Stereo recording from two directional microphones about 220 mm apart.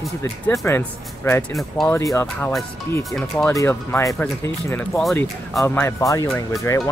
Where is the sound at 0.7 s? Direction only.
10° left (ahead or behind).